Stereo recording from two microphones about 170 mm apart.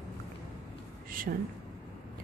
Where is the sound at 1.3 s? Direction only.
60° right (ahead or behind).